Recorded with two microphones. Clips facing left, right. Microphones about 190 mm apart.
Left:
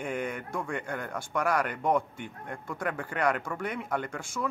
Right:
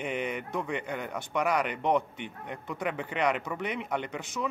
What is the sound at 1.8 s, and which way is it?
Speech, 10° left (ahead or behind).